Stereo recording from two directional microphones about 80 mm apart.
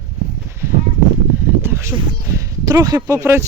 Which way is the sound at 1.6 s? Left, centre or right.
Right.